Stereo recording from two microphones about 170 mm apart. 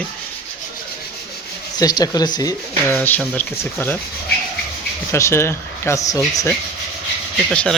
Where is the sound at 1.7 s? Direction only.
25° left (ahead or behind).